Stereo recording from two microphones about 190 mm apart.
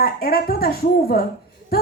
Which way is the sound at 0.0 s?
50° left (ahead or behind).